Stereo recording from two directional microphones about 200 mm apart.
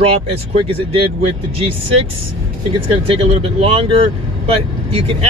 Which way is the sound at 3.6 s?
30° right (ahead or behind).